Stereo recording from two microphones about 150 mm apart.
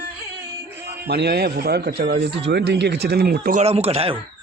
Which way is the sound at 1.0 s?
90° right.